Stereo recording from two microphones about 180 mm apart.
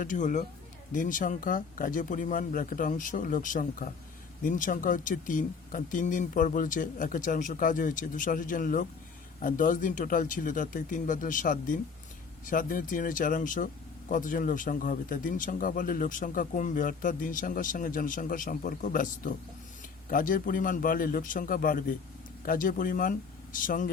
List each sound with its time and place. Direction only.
0.0 s a man's voice: 45° left (ahead or behind)